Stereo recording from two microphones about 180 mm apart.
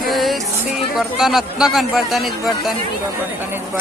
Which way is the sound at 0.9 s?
Centre (ahead or behind).